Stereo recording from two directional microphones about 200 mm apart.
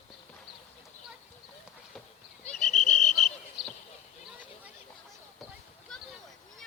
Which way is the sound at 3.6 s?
Centre (ahead or behind).